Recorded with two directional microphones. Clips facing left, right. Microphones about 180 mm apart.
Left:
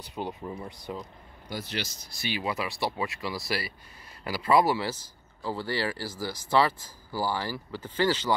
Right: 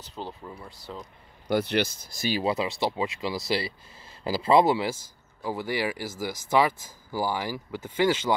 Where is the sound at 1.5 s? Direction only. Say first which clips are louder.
Right 10 dB; 60° right (ahead or behind); by 2.4 s 45° right (ahead or behind).